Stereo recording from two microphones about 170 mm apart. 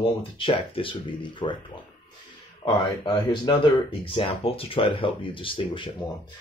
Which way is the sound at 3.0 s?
25° left (ahead or behind).